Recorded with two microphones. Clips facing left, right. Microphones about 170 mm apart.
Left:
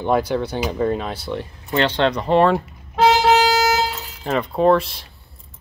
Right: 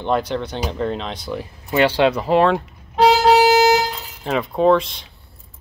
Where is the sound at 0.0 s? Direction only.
10° left (ahead or behind).